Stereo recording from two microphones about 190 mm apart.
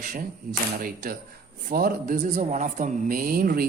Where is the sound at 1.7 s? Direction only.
50° right (ahead or behind).